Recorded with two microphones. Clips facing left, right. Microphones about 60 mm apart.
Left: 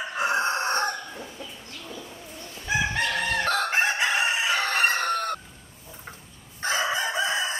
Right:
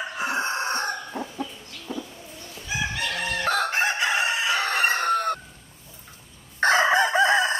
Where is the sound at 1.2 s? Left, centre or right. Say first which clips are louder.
Right 7 dB; right.